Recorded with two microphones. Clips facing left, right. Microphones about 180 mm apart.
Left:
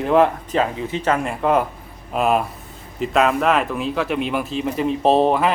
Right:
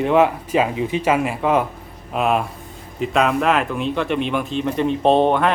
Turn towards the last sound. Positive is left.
turn(degrees=5)  # may be behind; listen again after turning